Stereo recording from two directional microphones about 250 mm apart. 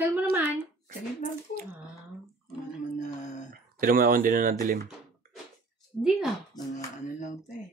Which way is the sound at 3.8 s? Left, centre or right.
Right.